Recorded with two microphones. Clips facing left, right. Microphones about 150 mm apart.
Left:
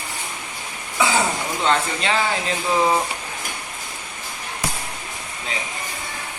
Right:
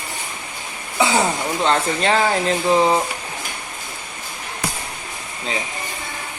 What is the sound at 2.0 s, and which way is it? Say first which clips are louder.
Speech: right 4 dB; 40° right (ahead or behind).